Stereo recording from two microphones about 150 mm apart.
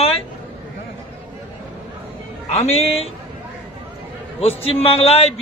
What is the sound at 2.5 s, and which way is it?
Speech, 45° left (ahead or behind).